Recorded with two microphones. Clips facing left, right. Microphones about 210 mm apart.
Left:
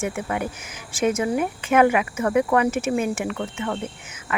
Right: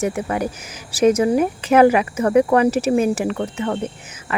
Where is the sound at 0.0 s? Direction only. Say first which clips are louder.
Right 5 dB; 35° right (ahead or behind).